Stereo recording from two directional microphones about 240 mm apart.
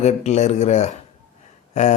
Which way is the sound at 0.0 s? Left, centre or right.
Left.